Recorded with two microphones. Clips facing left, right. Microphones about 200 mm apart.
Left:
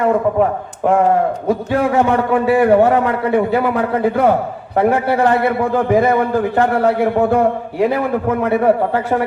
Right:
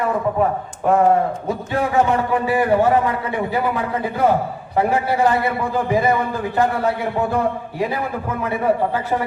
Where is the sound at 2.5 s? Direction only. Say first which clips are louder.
Left 5 dB; 65° left (ahead or behind).